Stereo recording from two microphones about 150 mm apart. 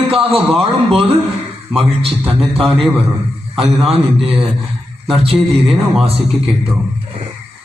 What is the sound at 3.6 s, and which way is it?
A man's voice, 40° right (ahead or behind).